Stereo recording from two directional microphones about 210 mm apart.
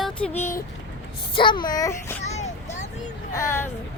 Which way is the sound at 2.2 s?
35° left (ahead or behind).